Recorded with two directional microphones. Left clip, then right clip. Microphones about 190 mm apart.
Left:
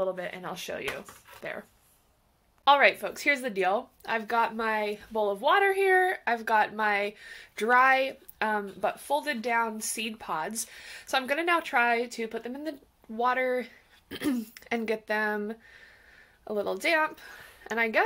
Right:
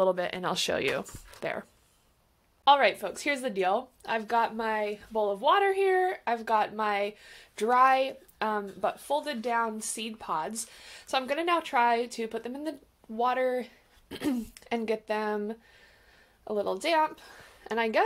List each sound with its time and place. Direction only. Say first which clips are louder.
0.0 s speech: right 5 dB; 55° right (ahead or behind)
2.6 s speech: left 1 dB; centre (ahead or behind)
12.2 s a woman's voice: even; 15° right (ahead or behind)
13.1 s a woman's voice: left 1 dB; centre (ahead or behind)